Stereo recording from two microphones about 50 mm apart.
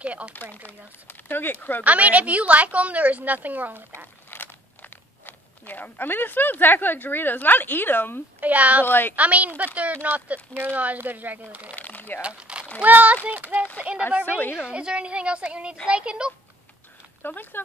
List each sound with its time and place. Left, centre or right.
0.0 s a woman's voice: right
0.3 s speech: left
1.9 s a woman's voice: right
4.3 s speech: left
8.4 s speech: right
8.8 s speech: left
9.1 s a woman's voice: right
11.7 s a sound: left
12.2 s crumpling: right
12.8 s a woman's voice: right
17.2 s speech: left